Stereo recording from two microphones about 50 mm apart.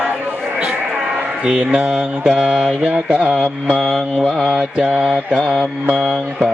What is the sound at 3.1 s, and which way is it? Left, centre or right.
Mantra, right.